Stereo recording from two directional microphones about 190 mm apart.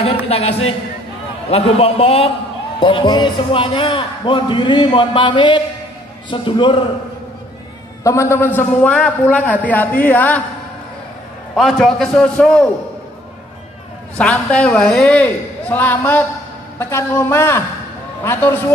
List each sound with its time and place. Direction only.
0.3 s a man's voice: 30° left (ahead or behind)
8.0 s a man's voice: 15° left (ahead or behind)
11.5 s a man's voice: centre (ahead or behind)
14.1 s a man's voice: 5° left (ahead or behind)